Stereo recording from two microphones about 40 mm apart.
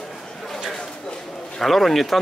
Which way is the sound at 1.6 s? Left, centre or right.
Centre.